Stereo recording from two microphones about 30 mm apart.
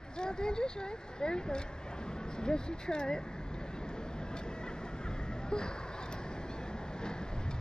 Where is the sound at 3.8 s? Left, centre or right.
Left.